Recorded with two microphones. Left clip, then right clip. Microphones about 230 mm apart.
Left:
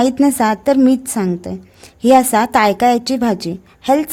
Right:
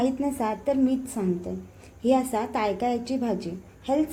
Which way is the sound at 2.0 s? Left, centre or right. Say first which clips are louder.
Left 13 dB; left.